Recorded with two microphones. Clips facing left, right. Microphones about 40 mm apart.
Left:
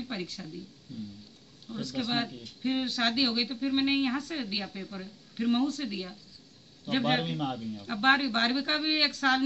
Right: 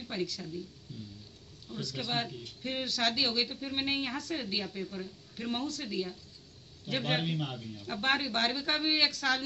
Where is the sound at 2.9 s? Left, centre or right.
Left.